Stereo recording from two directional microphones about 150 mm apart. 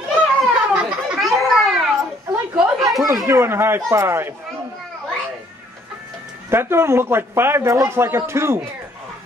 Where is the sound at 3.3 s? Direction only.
15° right (ahead or behind).